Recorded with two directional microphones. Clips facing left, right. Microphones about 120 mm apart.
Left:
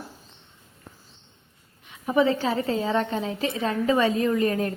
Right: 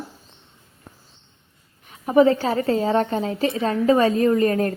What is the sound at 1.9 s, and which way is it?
A woman's voice, 40° right (ahead or behind).